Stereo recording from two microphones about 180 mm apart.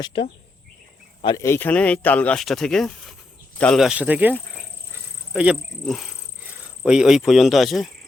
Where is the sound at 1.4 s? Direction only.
10° left (ahead or behind).